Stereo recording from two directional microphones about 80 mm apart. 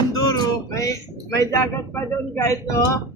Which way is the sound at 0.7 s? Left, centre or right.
Left.